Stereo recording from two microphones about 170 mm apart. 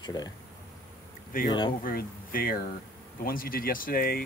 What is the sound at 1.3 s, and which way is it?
Speech, 55° left (ahead or behind).